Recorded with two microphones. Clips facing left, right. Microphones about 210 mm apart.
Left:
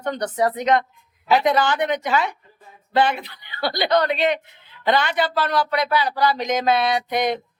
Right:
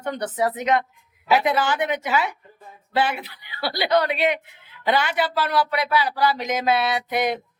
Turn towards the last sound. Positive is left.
turn(degrees=-5)  # may be behind; listen again after turning